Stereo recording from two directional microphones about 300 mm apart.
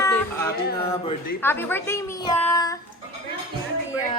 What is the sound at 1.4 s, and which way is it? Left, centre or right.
A woman's voice, centre.